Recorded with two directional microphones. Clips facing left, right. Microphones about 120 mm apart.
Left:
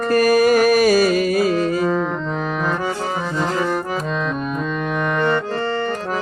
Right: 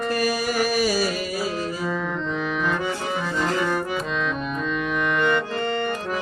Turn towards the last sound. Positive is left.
turn(degrees=40)  # may be behind; listen again after turning